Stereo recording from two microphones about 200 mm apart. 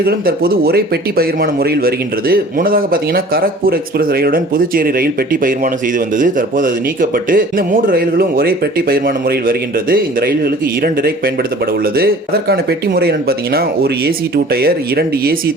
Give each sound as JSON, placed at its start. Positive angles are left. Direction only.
{"t": 0.0, "sound": "speech", "side_deg": -50}